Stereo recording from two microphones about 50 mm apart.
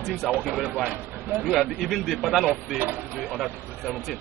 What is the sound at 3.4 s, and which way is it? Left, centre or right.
Speech, centre.